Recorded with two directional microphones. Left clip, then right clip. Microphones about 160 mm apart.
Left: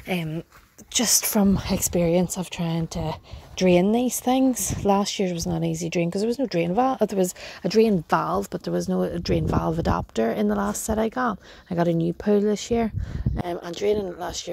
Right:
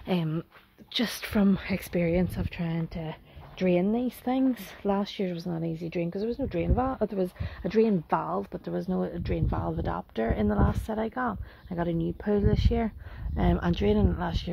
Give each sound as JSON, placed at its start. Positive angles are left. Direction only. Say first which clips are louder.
{"t": 0.1, "sound": "speech", "louder": "left 2 dB", "side_deg": -5}
{"t": 0.9, "sound": "speech", "louder": "left 7 dB", "side_deg": 20}